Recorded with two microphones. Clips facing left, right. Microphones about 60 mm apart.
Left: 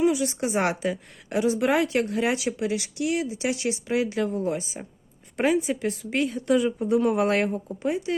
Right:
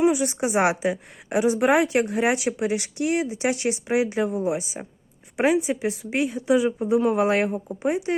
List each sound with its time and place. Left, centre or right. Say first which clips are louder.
0.0 s a woman's voice: right 2 dB; right; by 7.5 s centre
7.5 s speech: right 2 dB; right